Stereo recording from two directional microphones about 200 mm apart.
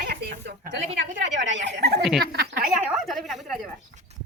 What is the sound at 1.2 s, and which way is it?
A woman's voice, 65° right (ahead or behind).